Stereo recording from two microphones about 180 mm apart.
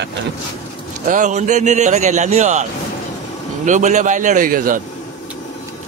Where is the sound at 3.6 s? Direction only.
40° right (ahead or behind).